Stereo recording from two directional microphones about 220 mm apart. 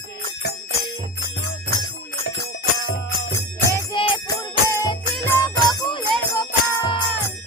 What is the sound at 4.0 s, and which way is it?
Music, 25° left (ahead or behind).